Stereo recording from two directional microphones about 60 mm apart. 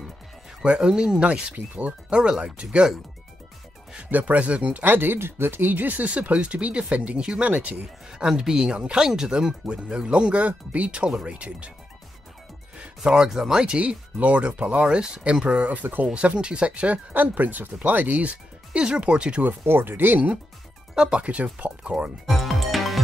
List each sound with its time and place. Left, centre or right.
0.6 s speech: centre
4.1 s speech: right
8.1 s speech: centre
13.0 s speech: centre
15.8 s speech: right
16.1 s speech: centre
19.6 s speech: right
20.9 s speech: centre
22.2 s music: centre